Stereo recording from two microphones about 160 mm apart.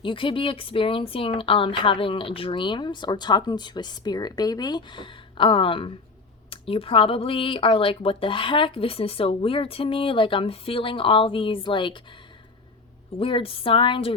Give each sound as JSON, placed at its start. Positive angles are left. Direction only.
{"t": 0.0, "sound": "speech", "side_deg": 30}
{"t": 13.1, "sound": "speech", "side_deg": 35}